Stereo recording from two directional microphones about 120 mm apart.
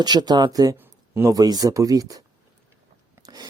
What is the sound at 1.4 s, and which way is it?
Speech, 30° right (ahead or behind).